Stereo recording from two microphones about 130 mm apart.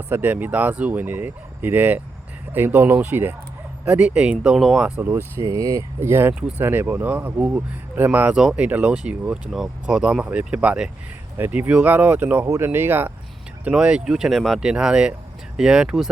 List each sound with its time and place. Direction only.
0.1 s speech: 15° right (ahead or behind)
4.9 s speech: 15° right (ahead or behind)